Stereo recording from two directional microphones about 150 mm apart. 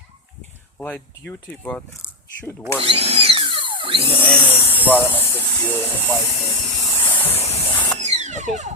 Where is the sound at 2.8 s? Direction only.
40° right (ahead or behind).